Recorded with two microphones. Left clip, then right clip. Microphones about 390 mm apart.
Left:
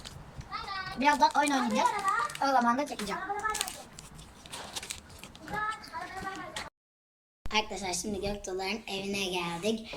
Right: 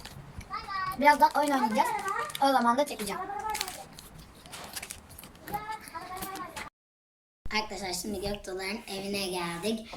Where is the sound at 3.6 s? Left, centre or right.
Centre.